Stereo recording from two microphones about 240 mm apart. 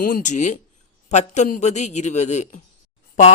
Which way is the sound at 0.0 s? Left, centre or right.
Left.